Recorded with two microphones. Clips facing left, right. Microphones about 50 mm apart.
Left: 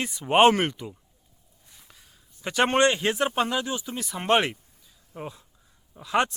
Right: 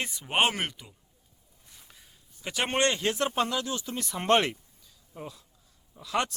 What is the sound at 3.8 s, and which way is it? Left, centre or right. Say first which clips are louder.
Speech: right 2 dB; centre.